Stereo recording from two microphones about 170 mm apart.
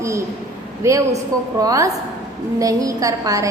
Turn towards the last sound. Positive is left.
turn(degrees=-20)  # may be behind; listen again after turning